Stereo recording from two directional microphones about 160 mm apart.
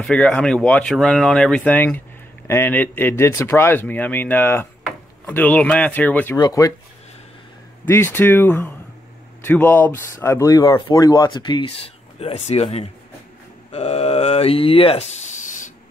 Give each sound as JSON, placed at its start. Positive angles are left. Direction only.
{"t": 0.0, "sound": "speech", "side_deg": 5}
{"t": 6.3, "sound": "speech", "side_deg": 25}
{"t": 7.9, "sound": "speech", "side_deg": 15}